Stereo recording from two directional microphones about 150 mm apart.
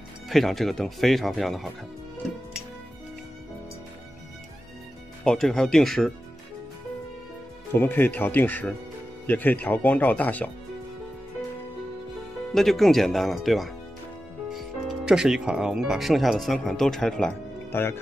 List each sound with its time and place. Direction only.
0.3 s speech: centre (ahead or behind)
5.2 s speech: 5° left (ahead or behind)
7.7 s speech: 15° left (ahead or behind)
12.5 s speech: centre (ahead or behind)
17.6 s speech: 15° left (ahead or behind)